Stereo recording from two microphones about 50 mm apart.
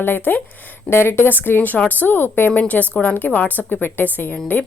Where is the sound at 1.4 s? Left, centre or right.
Left.